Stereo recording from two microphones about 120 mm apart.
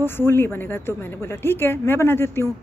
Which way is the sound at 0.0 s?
20° left (ahead or behind).